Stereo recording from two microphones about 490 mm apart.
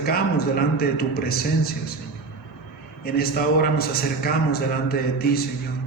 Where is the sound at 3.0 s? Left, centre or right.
Centre.